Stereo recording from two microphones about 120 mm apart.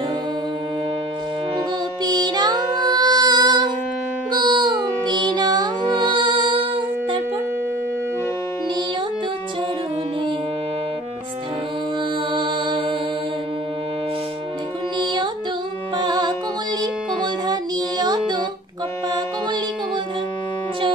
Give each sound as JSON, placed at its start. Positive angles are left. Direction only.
{"t": 2.0, "sound": "music", "side_deg": -35}
{"t": 12.4, "sound": "music", "side_deg": -45}
{"t": 16.0, "sound": "music", "side_deg": -35}